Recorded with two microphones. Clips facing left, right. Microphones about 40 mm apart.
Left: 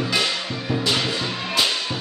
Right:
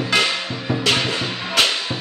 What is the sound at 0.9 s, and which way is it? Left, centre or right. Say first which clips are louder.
Music: right 2 dB; right.